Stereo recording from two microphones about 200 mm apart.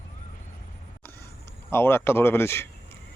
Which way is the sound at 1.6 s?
10° left (ahead or behind).